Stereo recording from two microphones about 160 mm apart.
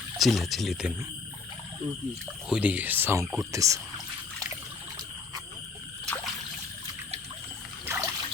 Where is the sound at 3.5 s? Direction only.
20° right (ahead or behind).